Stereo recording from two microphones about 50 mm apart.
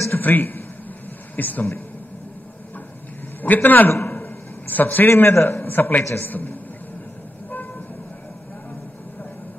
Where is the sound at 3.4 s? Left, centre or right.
Left.